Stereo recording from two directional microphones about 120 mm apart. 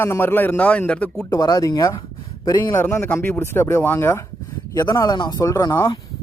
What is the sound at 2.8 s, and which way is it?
A man's voice, 15° left (ahead or behind).